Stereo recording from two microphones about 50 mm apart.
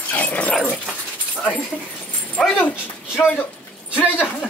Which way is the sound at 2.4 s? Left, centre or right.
Centre.